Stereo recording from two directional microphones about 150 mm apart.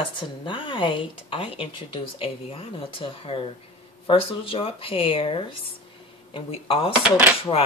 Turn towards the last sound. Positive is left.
turn(degrees=15)  # may be behind; listen again after turning